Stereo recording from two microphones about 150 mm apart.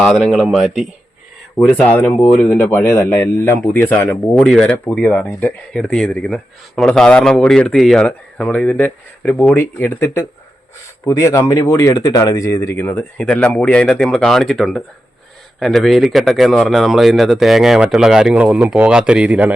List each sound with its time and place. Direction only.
0.0 s a man's voice: centre (ahead or behind)